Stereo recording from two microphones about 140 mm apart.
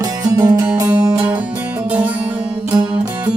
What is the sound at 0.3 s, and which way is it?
Music, 25° right (ahead or behind).